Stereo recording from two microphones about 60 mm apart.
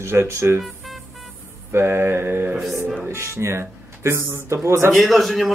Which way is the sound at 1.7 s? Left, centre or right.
Right.